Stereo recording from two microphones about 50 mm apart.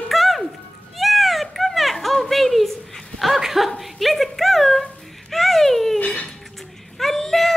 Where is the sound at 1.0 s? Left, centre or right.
Centre.